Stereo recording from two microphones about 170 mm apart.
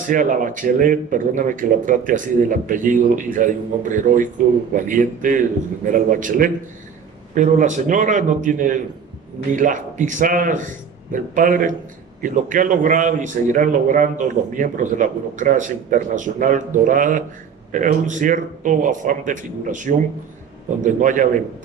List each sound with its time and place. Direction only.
0.0 s a man's voice: 50° right (ahead or behind)